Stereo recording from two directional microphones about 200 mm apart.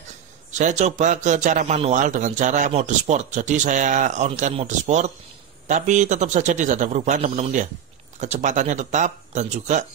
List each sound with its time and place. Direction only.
0.5 s a man's voice: 35° right (ahead or behind)